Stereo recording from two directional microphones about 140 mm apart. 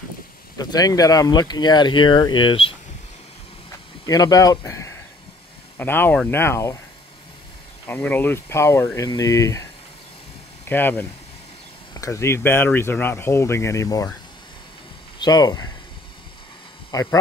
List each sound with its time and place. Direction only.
0.6 s speech: 25° left (ahead or behind)
4.0 s speech: 25° left (ahead or behind)
7.8 s speech: 15° left (ahead or behind)
10.7 s speech: 15° left (ahead or behind)
15.1 s speech: 30° left (ahead or behind)
16.9 s speech: 25° left (ahead or behind)